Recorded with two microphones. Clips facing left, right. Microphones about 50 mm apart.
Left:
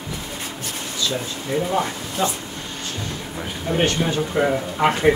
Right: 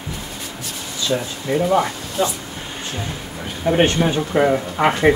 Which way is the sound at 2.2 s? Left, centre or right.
Centre.